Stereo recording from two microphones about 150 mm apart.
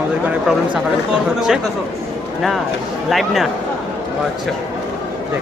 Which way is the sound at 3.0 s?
Centre (ahead or behind).